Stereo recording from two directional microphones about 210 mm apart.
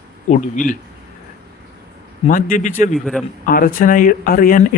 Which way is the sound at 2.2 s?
40° left (ahead or behind).